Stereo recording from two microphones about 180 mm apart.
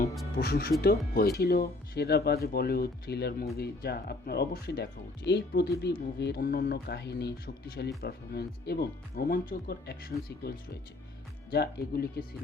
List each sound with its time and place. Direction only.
0.3 s speech: 60° left (ahead or behind)